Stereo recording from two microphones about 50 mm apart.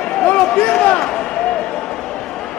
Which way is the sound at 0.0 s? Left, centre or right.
Centre.